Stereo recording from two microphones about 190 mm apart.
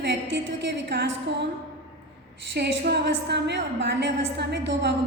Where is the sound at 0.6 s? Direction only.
60° right (ahead or behind).